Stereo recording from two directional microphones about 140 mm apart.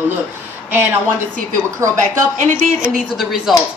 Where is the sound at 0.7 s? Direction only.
15° right (ahead or behind).